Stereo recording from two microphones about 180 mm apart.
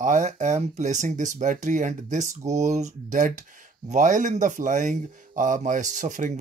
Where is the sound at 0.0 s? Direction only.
45° right (ahead or behind).